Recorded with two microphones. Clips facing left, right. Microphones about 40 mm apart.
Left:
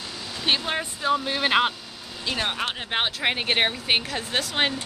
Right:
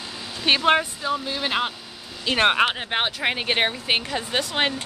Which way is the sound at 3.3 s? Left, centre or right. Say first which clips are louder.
Even; centre.